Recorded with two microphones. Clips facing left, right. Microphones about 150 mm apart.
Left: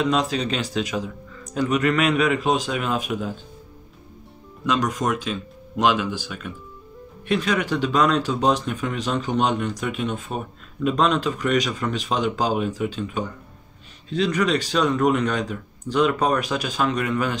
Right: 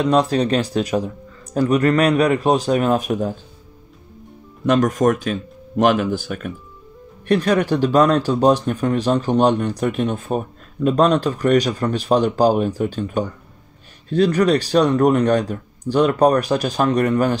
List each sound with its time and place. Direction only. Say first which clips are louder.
0.2 s speech: right 7 dB; 45° right (ahead or behind)
4.6 s speech: right 7 dB; 50° right (ahead or behind)
7.3 s speech: right 5 dB; 40° right (ahead or behind)